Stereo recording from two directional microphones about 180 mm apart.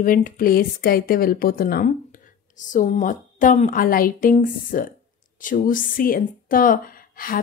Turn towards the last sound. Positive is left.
turn(degrees=50)  # may be behind; listen again after turning